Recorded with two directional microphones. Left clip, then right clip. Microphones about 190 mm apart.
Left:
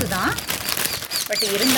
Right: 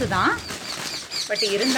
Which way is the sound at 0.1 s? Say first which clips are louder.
Right 3 dB; 25° left (ahead or behind).